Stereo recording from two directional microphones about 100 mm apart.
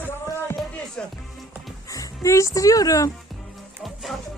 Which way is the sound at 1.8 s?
35° left (ahead or behind).